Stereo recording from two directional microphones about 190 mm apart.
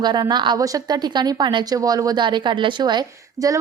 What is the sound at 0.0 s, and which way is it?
A woman's voice, 20° right (ahead or behind).